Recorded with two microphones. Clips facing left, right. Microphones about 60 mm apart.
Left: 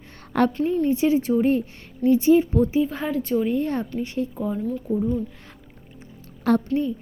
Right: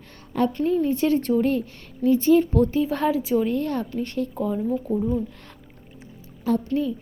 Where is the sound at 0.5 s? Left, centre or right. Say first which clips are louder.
Even; centre.